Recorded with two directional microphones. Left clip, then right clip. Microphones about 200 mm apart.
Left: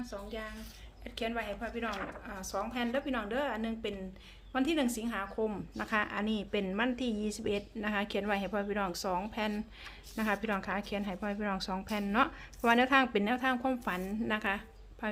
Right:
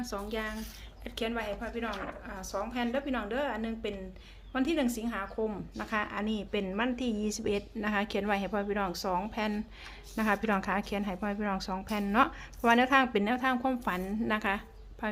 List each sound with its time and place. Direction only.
0.1 s speech: 30° right (ahead or behind)
1.0 s a woman's voice: 10° right (ahead or behind)